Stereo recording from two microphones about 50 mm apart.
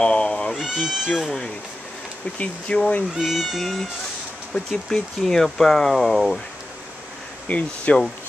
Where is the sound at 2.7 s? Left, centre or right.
Left.